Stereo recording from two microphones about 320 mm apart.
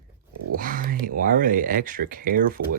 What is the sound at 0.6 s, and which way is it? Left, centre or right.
Speech, right.